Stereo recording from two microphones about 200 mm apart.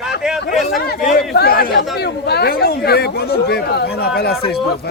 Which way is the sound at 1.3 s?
50° left (ahead or behind).